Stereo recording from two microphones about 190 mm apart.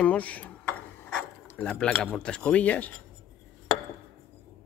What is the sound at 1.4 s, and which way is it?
Speech, 5° left (ahead or behind).